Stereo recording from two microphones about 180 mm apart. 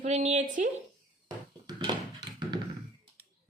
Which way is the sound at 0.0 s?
40° right (ahead or behind).